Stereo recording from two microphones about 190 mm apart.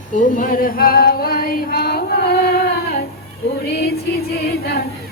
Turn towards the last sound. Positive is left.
turn(degrees=55)  # may be behind; listen again after turning